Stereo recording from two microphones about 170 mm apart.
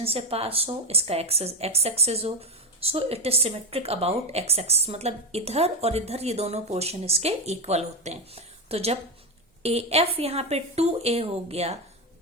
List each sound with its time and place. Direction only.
0.0 s a woman's voice: 35° right (ahead or behind)